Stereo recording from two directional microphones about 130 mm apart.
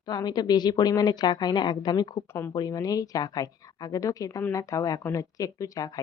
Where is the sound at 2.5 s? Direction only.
30° left (ahead or behind).